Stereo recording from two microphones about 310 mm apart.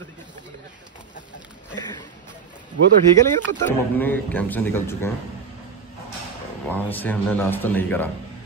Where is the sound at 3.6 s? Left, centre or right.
Centre.